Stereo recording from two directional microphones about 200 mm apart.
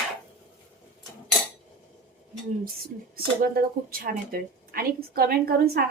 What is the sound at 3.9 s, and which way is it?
A woman's voice, 45° right (ahead or behind).